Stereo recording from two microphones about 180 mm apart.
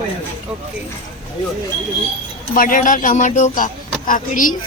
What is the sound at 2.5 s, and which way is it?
Speech, 50° left (ahead or behind).